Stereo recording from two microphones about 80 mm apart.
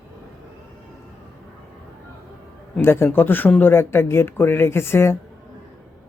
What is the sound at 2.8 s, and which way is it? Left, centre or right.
Speech, left.